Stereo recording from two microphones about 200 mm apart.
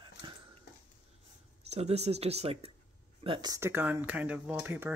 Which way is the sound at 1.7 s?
30° right (ahead or behind).